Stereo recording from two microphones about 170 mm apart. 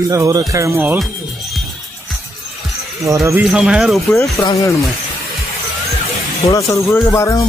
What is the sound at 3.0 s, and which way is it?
Speech, 20° right (ahead or behind).